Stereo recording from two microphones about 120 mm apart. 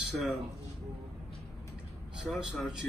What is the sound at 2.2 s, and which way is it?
Speech, 5° right (ahead or behind).